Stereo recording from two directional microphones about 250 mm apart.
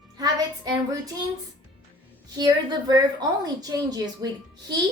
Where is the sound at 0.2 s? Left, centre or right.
Centre.